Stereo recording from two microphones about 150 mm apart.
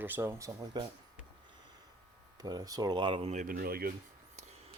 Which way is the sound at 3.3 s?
65° right (ahead or behind).